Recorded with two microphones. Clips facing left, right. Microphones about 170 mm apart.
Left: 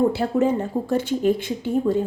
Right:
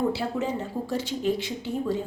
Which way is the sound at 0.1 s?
50° left (ahead or behind).